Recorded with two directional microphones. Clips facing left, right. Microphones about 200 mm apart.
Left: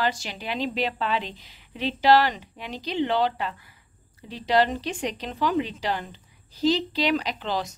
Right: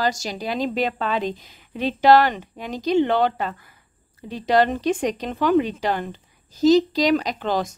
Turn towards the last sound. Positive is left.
turn(degrees=-50)  # may be behind; listen again after turning